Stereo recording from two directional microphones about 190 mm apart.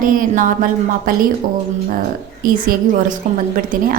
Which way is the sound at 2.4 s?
50° right (ahead or behind).